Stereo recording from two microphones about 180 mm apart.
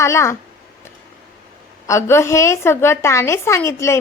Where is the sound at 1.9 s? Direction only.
15° left (ahead or behind).